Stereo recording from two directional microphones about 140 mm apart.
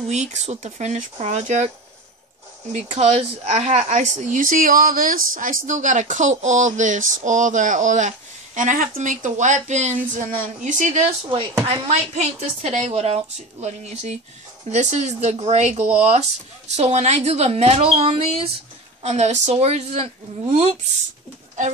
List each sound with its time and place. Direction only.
0.1 s a woman's voice: 55° right (ahead or behind)
2.7 s speech: 50° right (ahead or behind)
11.6 s a woman's voice: 45° right (ahead or behind)